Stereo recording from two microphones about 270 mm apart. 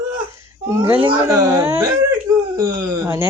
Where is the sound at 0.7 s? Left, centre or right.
Centre.